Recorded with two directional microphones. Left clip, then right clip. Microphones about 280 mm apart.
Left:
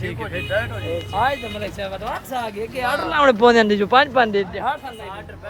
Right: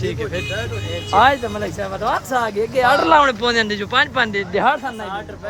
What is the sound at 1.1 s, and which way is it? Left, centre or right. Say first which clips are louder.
Speech: right 8 dB; right.